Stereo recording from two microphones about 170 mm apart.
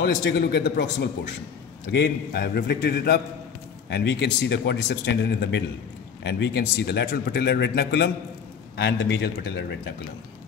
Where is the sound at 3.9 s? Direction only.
85° left.